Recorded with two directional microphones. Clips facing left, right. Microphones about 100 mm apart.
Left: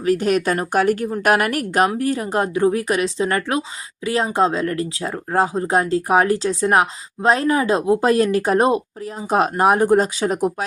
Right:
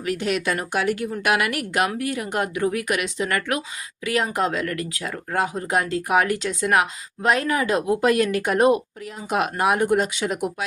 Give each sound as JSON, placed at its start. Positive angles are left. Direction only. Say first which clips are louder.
{"t": 0.0, "sound": "speech", "louder": "left 6 dB", "side_deg": 40}